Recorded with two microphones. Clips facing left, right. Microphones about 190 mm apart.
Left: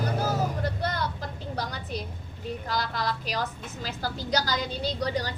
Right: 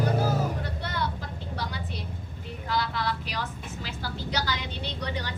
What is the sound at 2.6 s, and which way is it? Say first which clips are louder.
A woman's voice: right 2 dB; 40° left (ahead or behind).